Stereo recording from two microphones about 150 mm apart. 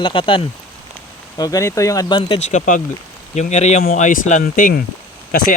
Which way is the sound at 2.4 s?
50° left (ahead or behind).